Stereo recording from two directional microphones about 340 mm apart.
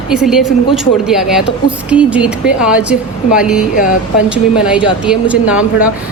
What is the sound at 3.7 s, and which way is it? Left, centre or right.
Speech, left.